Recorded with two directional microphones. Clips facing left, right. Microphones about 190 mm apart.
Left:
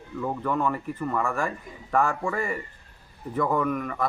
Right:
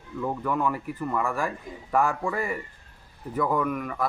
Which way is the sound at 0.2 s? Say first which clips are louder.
Even; centre (ahead or behind).